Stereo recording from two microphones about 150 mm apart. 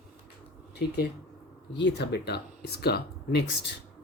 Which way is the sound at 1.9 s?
90° left.